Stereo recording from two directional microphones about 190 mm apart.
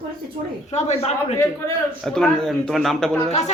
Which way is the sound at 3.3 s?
35° left (ahead or behind).